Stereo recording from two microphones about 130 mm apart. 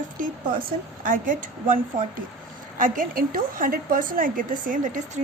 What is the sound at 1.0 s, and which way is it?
A woman's voice, 90° right.